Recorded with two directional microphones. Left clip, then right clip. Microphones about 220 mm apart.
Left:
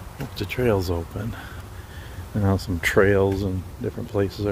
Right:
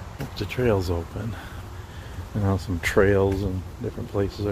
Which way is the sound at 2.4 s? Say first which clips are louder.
Left 3 dB; 25° left (ahead or behind).